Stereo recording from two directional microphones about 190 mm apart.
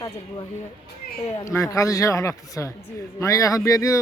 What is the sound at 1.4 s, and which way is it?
A man's voice, 15° left (ahead or behind).